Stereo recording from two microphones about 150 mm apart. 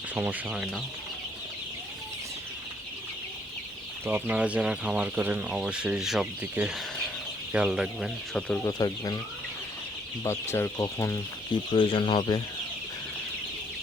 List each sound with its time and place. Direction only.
0.1 s speech: 10° right (ahead or behind)
4.0 s speech: 10° right (ahead or behind); by 8.6 s 5° left (ahead or behind)
8.6 s speech: 25° left (ahead or behind)
10.2 s speech: 15° left (ahead or behind)
11.7 s speech: 35° left (ahead or behind)